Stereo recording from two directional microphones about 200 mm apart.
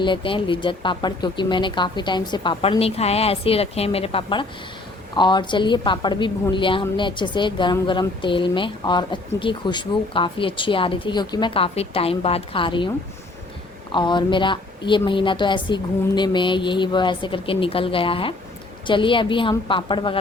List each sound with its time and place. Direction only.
0.0 s a woman's voice: 25° left (ahead or behind)
13.9 s a woman's voice: 20° left (ahead or behind)